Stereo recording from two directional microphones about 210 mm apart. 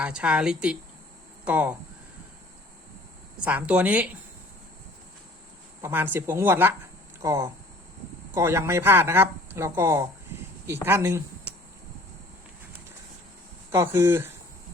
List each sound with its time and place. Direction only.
0.0 s a woman's voice: 5° right (ahead or behind)
3.4 s speech: 5° right (ahead or behind)
5.8 s speech: 10° right (ahead or behind)
13.7 s speech: 10° right (ahead or behind)